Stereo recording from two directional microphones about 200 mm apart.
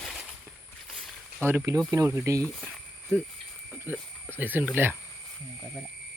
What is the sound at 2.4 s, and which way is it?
Cricket, centre (ahead or behind).